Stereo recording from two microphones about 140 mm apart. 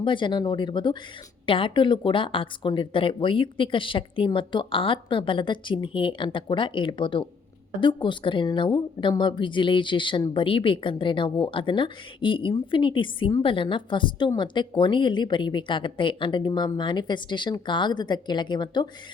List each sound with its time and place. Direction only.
0.0 s speech: 35° left (ahead or behind)